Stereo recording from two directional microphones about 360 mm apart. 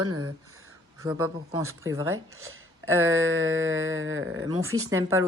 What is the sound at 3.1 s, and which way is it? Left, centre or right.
Speech, right.